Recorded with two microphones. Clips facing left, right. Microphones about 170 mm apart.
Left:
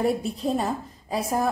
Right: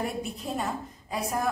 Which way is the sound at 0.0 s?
35° left (ahead or behind).